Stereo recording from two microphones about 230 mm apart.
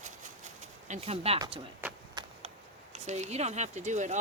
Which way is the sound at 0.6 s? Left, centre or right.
Right.